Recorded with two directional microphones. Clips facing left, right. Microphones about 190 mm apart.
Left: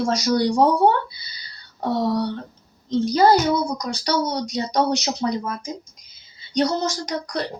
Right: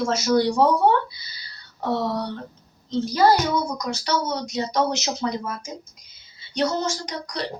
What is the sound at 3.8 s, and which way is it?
Speech, 35° left (ahead or behind).